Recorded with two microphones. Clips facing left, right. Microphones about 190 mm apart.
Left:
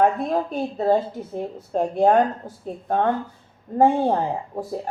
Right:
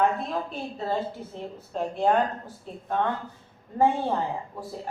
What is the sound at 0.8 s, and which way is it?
A woman's voice, 45° left (ahead or behind).